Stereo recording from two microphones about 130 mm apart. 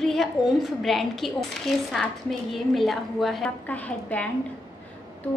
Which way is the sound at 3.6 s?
10° left (ahead or behind).